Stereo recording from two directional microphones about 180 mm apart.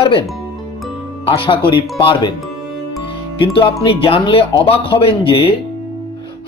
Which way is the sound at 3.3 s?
30° left (ahead or behind).